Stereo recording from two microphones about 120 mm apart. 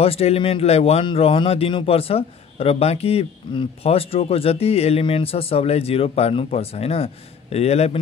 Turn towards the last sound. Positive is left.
turn(degrees=60)  # may be behind; listen again after turning